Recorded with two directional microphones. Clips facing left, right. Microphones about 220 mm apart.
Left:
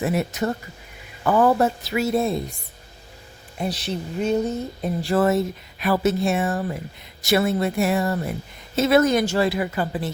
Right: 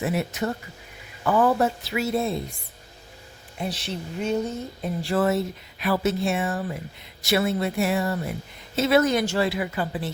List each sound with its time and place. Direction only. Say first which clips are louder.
0.0 s a woman's voice: left 3 dB; 45° left (ahead or behind)
3.6 s a woman's voice: left 4 dB; 40° left (ahead or behind)